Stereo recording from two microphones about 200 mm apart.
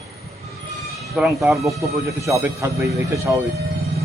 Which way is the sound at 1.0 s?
Centre (ahead or behind).